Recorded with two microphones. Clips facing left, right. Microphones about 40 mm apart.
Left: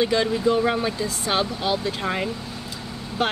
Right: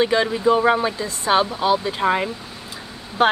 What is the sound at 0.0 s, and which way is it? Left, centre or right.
Speech, right.